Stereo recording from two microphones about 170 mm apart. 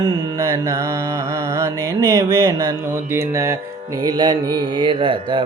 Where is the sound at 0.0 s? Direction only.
20° right (ahead or behind).